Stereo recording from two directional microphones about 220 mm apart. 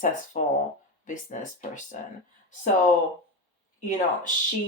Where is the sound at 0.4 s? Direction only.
40° left (ahead or behind).